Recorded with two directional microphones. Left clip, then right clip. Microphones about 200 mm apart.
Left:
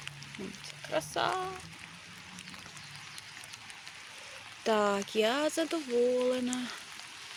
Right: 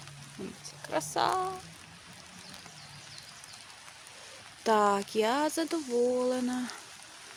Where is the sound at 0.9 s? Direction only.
20° right (ahead or behind).